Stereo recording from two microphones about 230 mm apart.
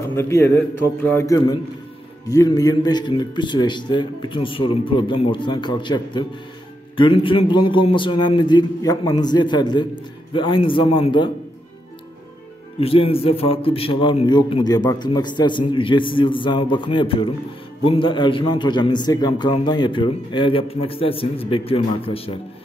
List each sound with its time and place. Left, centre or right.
0.1 s a man's voice: centre
12.8 s a man's voice: left